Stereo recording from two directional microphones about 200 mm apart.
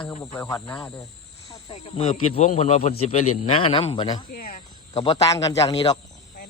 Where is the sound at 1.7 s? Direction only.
30° left (ahead or behind).